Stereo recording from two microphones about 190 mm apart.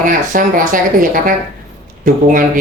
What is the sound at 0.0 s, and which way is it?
Speech, 45° right (ahead or behind).